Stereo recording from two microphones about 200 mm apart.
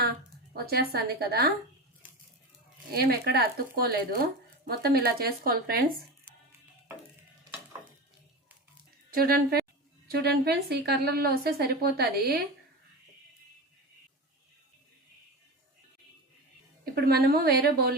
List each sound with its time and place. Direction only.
0.5 s a woman's voice: 50° right (ahead or behind)
2.9 s a woman's voice: 50° right (ahead or behind)
9.1 s a woman's voice: 50° right (ahead or behind)
16.8 s a woman's voice: 50° right (ahead or behind)